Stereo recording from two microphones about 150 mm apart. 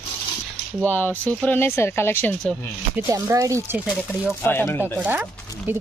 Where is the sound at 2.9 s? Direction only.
20° right (ahead or behind).